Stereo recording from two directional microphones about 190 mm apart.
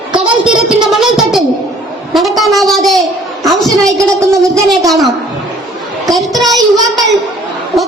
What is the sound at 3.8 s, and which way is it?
Speech, 15° right (ahead or behind).